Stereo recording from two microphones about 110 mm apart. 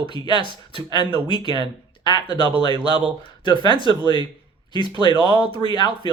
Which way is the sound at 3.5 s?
40° left (ahead or behind).